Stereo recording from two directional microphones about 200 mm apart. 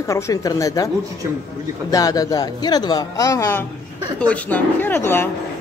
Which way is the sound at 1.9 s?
20° left (ahead or behind).